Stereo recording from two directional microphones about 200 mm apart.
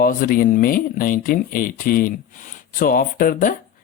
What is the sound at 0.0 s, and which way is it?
Speech, 45° left (ahead or behind).